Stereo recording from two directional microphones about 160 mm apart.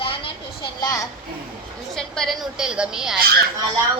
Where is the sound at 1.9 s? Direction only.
5° left (ahead or behind).